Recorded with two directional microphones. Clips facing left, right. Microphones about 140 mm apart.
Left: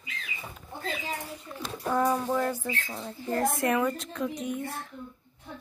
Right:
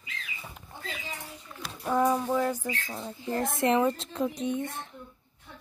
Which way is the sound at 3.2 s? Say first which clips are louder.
Left 1 dB; 20° right (ahead or behind).